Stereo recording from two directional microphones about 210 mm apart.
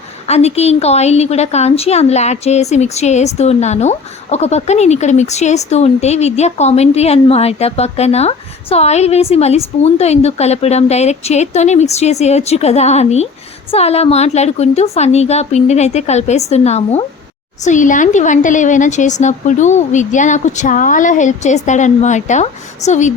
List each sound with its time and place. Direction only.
0.3 s a woman's voice: 30° left (ahead or behind)